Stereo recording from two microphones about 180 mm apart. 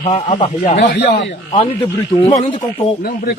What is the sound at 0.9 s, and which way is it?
Speech, 65° left (ahead or behind).